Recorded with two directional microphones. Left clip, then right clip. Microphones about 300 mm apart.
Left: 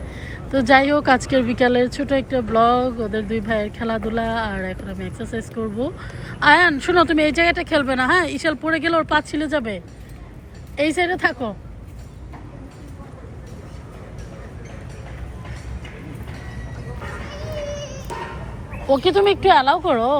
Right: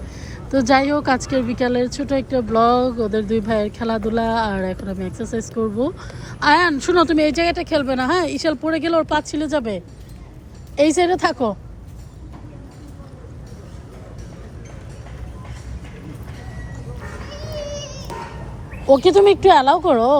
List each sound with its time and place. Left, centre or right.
0.2 s speech: centre
18.1 s a sound: left
18.9 s speech: centre